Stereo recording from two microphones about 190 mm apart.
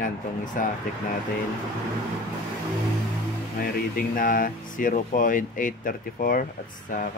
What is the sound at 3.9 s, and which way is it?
Speech, 45° left (ahead or behind).